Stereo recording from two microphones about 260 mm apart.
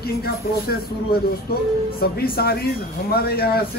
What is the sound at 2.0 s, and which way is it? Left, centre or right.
Speech, left.